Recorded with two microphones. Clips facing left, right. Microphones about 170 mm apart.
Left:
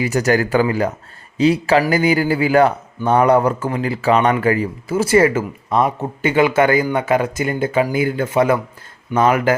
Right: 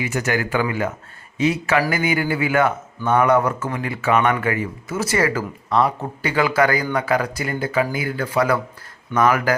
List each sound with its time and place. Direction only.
0.0 s a man's voice: 40° left (ahead or behind)